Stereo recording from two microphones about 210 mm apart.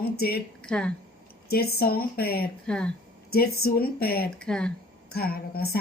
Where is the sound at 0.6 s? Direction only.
5° left (ahead or behind).